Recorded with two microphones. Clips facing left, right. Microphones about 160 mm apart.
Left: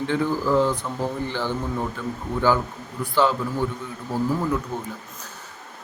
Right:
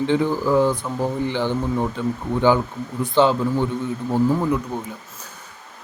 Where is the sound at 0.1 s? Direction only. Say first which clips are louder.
Right 1 dB; 20° right (ahead or behind).